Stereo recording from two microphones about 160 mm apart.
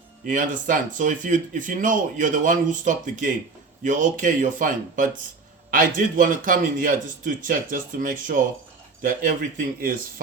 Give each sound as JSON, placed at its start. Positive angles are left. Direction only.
{"t": 0.3, "sound": "speech", "side_deg": -55}